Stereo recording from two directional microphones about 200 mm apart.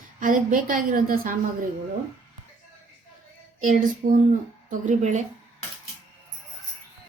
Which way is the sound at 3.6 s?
40° right (ahead or behind).